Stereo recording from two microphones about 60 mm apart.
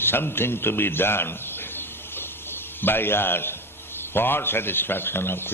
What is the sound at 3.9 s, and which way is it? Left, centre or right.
A man's voice, left.